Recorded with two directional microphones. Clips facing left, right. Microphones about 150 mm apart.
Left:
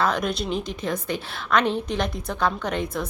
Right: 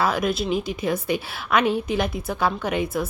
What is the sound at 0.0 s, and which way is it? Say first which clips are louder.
Speech: right 2 dB; 5° right (ahead or behind).